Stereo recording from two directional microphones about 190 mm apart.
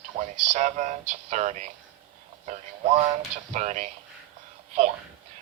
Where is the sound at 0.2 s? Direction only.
40° right (ahead or behind).